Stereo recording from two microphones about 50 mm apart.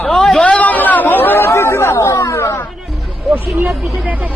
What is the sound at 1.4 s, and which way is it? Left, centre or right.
Speech, left.